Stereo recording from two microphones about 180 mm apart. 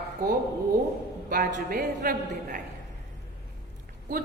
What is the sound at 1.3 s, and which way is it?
A woman's voice, 50° right (ahead or behind).